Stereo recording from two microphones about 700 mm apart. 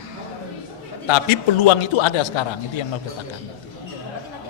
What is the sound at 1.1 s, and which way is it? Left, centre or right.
A man's voice, left.